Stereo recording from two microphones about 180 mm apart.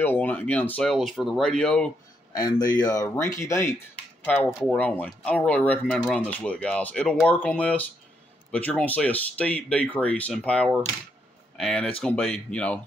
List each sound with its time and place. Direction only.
0.0 s speech: 10° left (ahead or behind)
2.3 s speech: 20° left (ahead or behind)
4.5 s speech: centre (ahead or behind)